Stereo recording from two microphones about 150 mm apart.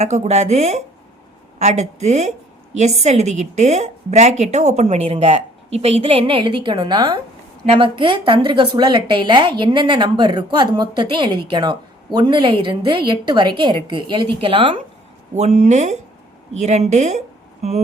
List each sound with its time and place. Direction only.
0.0 s a woman's voice: 45° right (ahead or behind)
15.4 s a woman's voice: 50° right (ahead or behind)